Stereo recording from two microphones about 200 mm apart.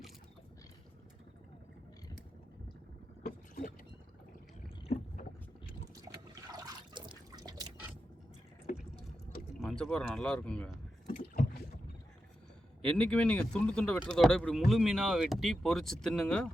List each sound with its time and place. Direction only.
3.2 s boat: 45° left (ahead or behind)
7.3 s drip: 20° right (ahead or behind)
8.7 s liquid: 45° left (ahead or behind)
9.6 s speech: centre (ahead or behind)
12.8 s speech: 5° left (ahead or behind)